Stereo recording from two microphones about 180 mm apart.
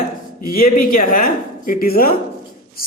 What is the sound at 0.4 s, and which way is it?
Speech, 55° left (ahead or behind).